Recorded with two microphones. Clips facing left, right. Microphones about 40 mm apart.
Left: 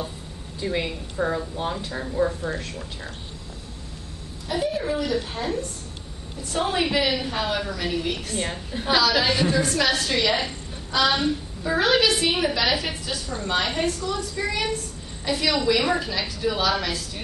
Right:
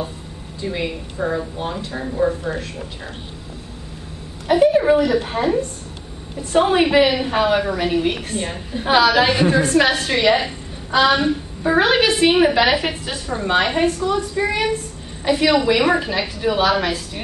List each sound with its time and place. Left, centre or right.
0.6 s a woman's voice: centre
4.5 s a woman's voice: right
5.2 s a woman's voice: right
8.4 s a woman's voice: centre
8.8 s a woman's voice: right